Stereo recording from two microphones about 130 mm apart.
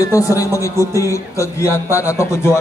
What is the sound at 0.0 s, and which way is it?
Speech, 25° left (ahead or behind).